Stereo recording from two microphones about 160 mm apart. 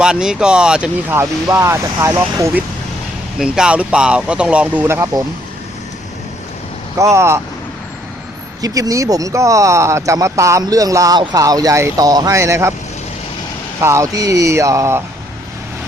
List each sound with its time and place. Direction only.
0.0 s speech: 5° right (ahead or behind)
1.2 s speech: 20° right (ahead or behind)
3.3 s speech: 5° right (ahead or behind)
7.0 s speech: 15° right (ahead or behind)
8.6 s speech: 20° right (ahead or behind)
13.8 s speech: 20° right (ahead or behind)